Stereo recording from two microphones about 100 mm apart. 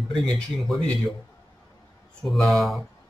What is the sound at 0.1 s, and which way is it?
Speech, 5° left (ahead or behind).